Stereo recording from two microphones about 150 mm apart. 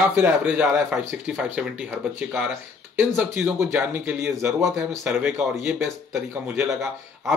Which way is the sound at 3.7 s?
10° right (ahead or behind).